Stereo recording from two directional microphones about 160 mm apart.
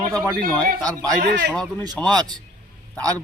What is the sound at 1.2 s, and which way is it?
Speech, 90° right.